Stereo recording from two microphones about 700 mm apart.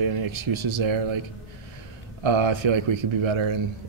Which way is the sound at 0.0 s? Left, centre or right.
Right.